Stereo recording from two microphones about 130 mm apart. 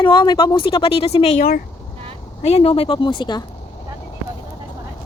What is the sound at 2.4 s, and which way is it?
A woman's voice, 50° left (ahead or behind).